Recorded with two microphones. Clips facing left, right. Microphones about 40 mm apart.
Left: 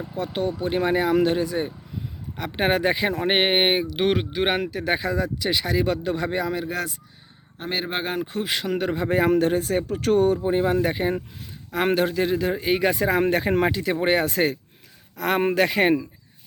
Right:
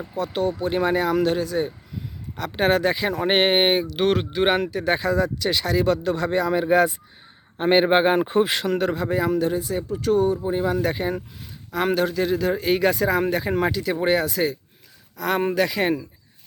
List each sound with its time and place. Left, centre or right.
0.2 s speech: centre
3.2 s speech: centre
6.7 s speech: right
7.6 s a man's voice: right
8.0 s speech: right
8.4 s speech: centre
9.0 s speech: left
9.3 s speech: left
10.4 s speech: left
13.7 s speech: left
15.1 s speech: centre